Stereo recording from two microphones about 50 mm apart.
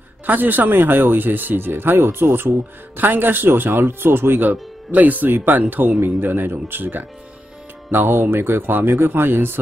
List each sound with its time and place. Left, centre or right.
0.3 s speech: right
5.9 s speech: right